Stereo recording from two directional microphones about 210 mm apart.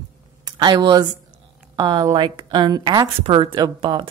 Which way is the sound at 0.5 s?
20° right (ahead or behind).